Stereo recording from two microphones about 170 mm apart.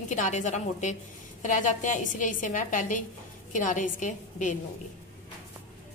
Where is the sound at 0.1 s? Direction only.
45° left (ahead or behind).